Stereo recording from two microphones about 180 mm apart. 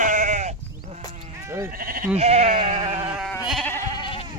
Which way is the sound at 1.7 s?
50° right (ahead or behind).